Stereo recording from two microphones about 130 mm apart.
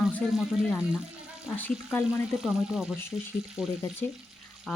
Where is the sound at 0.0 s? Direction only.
Centre (ahead or behind).